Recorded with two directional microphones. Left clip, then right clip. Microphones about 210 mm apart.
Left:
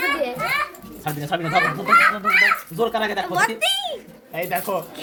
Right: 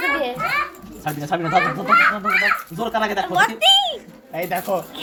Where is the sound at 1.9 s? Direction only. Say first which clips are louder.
Left 1 dB; 50° left (ahead or behind).